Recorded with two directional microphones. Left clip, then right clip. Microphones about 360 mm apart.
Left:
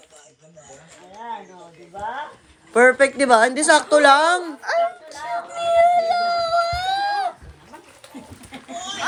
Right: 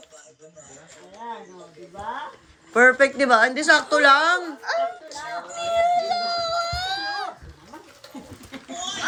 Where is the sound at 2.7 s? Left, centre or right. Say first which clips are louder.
Left 1 dB; centre.